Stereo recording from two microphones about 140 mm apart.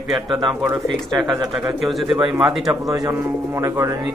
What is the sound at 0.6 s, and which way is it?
Speech, 25° right (ahead or behind).